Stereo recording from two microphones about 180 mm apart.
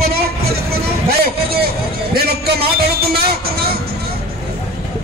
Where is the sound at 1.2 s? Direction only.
60° right (ahead or behind).